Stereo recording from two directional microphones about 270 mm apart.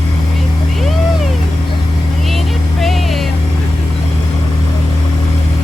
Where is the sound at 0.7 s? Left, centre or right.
Centre.